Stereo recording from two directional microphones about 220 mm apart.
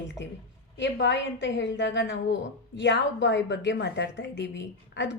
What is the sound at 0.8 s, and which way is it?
A woman's voice, 55° left (ahead or behind).